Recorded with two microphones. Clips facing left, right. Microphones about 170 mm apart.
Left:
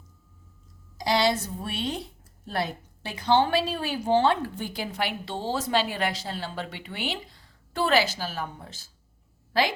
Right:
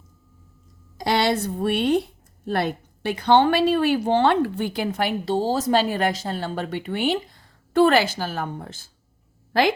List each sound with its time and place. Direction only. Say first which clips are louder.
0.9 s a woman's voice: right 3 dB; 60° right (ahead or behind)